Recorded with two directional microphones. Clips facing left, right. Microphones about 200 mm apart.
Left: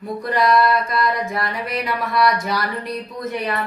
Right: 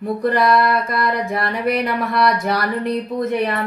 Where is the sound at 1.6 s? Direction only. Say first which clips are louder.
Right 5 dB; 55° right (ahead or behind).